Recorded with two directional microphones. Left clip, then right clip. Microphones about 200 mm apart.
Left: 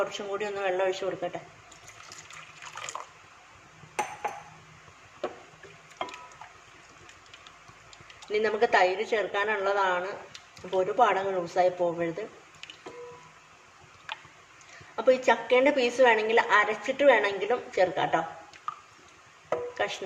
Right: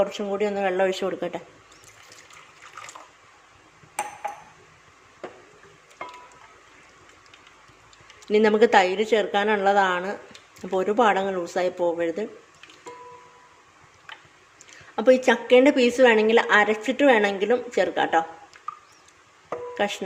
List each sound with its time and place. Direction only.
0.1 s speech: 35° right (ahead or behind); by 1.4 s 50° right (ahead or behind)
8.3 s a woman's voice: 55° right (ahead or behind)
14.9 s a woman's voice: 50° right (ahead or behind)
19.7 s speech: 50° right (ahead or behind)